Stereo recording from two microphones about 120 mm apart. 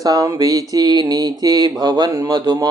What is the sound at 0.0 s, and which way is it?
Speech, 30° right (ahead or behind).